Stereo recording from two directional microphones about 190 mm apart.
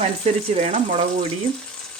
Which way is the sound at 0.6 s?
35° right (ahead or behind).